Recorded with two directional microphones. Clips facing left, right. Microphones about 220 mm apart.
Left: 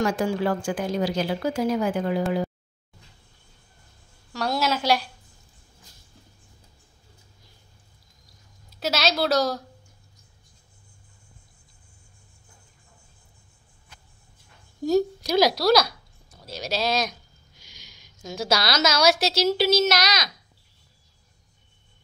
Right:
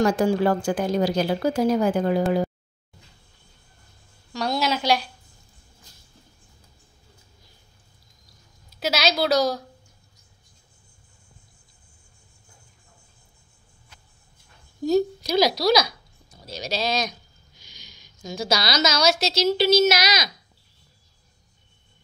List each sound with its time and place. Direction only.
0.0 s speech: 40° right (ahead or behind)
4.3 s a woman's voice: 5° left (ahead or behind)
8.7 s a woman's voice: centre (ahead or behind)
14.9 s a woman's voice: 10° left (ahead or behind)